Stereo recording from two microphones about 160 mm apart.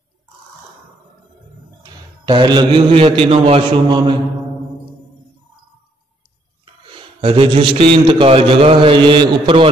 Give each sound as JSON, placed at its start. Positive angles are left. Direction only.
{"t": 2.2, "sound": "a man's voice", "side_deg": -25}
{"t": 6.6, "sound": "a man's voice", "side_deg": -30}